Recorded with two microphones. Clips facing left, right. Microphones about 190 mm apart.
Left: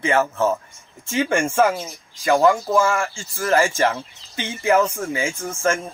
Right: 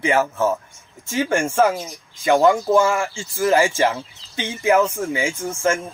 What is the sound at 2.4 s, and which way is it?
Speech, centre (ahead or behind).